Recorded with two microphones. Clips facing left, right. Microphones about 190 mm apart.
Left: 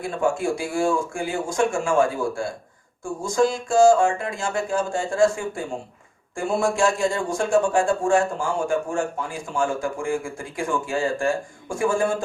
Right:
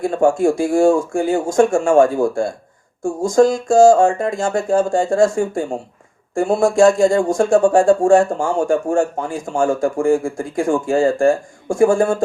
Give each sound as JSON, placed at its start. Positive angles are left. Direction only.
{"t": 0.0, "sound": "speech", "side_deg": -45}